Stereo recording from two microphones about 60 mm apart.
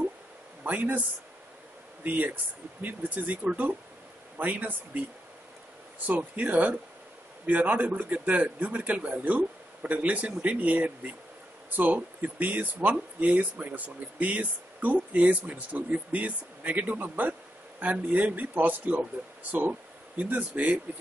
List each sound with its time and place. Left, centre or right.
0.7 s speech: right
2.0 s speech: right
6.0 s speech: right